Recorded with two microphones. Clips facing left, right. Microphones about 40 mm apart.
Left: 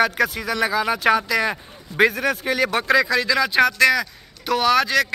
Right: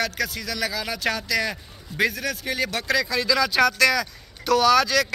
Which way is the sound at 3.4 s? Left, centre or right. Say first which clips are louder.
Left 2 dB; left.